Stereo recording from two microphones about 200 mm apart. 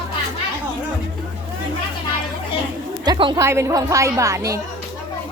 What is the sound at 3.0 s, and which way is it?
A woman's voice, 20° right (ahead or behind).